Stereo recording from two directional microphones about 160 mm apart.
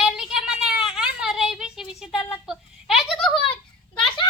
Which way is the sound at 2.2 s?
15° left (ahead or behind).